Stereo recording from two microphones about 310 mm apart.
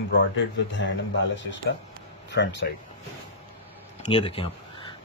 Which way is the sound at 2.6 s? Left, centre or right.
Left.